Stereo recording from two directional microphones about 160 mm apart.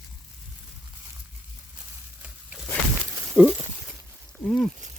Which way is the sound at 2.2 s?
10° right (ahead or behind).